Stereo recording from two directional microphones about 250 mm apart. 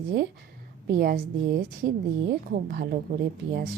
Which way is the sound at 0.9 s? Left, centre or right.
Right.